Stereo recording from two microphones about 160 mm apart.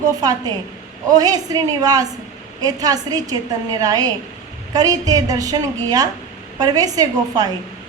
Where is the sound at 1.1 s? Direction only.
25° right (ahead or behind).